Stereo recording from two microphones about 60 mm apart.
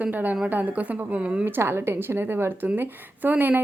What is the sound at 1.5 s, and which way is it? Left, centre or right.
Speech, right.